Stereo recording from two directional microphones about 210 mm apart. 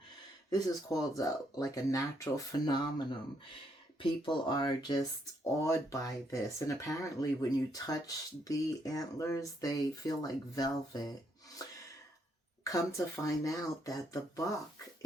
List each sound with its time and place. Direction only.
0.5 s speech: 15° left (ahead or behind)
4.3 s speech: 20° left (ahead or behind)
13.2 s speech: 15° left (ahead or behind)